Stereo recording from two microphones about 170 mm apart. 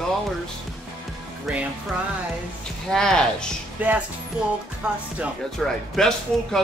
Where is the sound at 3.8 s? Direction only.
10° right (ahead or behind).